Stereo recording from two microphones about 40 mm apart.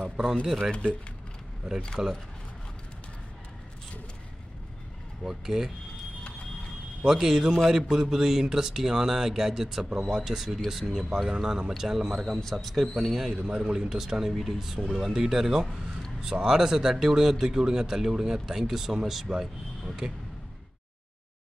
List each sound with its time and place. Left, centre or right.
2.0 s a man's voice: centre
5.2 s a man's voice: centre
7.1 s a man's voice: centre
11.7 s a man's voice: centre
12.5 s a man's voice: centre
13.5 s a man's voice: centre